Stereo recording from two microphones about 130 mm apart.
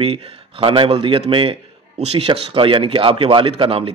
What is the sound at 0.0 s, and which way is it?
A man's voice, 50° right (ahead or behind).